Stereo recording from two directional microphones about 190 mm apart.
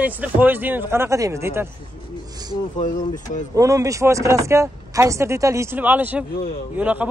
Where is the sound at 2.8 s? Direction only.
45° left (ahead or behind).